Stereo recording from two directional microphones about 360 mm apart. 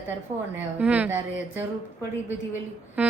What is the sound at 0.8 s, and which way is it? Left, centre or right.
Speech, centre.